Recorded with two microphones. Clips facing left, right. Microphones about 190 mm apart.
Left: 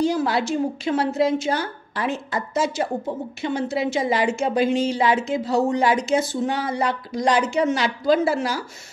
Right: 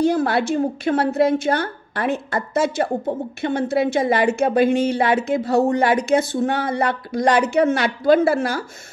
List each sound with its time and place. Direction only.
0.0 s speech: 55° right (ahead or behind)